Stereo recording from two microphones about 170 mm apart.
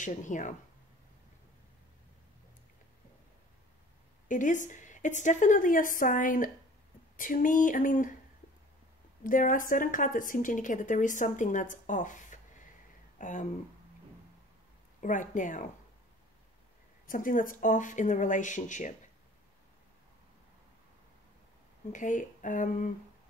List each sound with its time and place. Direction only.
0.0 s a woman's voice: 50° left (ahead or behind)
4.3 s a woman's voice: 50° left (ahead or behind)
9.2 s a woman's voice: 50° left (ahead or behind)
15.0 s a woman's voice: 50° left (ahead or behind)
17.0 s a woman's voice: 55° left (ahead or behind)
21.9 s a woman's voice: 50° left (ahead or behind)